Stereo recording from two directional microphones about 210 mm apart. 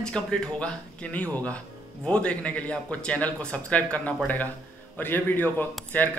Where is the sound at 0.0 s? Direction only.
5° left (ahead or behind).